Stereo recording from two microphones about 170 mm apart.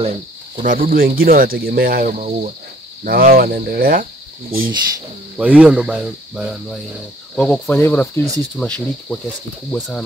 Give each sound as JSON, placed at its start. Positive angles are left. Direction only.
{"t": 0.0, "sound": "speech", "side_deg": -45}
{"t": 5.4, "sound": "speech", "side_deg": -5}
{"t": 7.3, "sound": "cricket", "side_deg": 10}
{"t": 9.7, "sound": "speech", "side_deg": 5}